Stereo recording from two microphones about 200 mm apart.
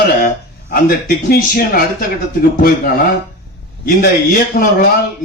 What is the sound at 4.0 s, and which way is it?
Speech, 45° left (ahead or behind).